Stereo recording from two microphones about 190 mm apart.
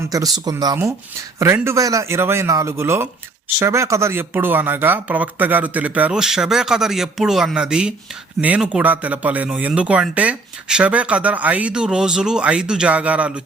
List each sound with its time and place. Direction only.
0.0 s speech: 20° right (ahead or behind)